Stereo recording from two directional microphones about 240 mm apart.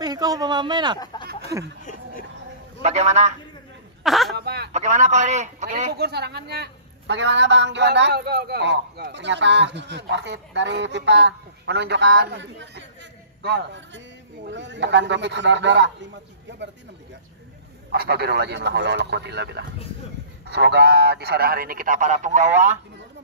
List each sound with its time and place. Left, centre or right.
0.0 s speech: centre
0.9 s speech: centre
2.8 s a man's voice: right
4.0 s a sound: centre
4.4 s a sound: right
4.7 s a man's voice: right
6.0 s a man's voice: right
17.9 s a man's voice: right